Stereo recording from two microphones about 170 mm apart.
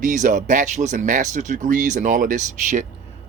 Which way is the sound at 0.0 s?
50° right (ahead or behind).